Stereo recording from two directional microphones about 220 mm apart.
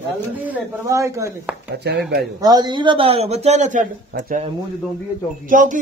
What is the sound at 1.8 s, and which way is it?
Speech, 50° right (ahead or behind).